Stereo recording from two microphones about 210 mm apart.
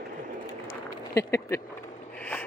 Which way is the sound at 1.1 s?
15° left (ahead or behind).